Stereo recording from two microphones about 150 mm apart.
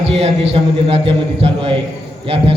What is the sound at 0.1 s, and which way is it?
A man's voice, 40° right (ahead or behind).